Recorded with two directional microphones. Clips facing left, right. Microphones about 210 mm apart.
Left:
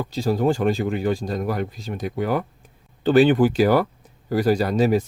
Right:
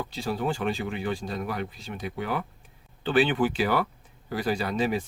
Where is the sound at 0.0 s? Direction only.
40° left (ahead or behind).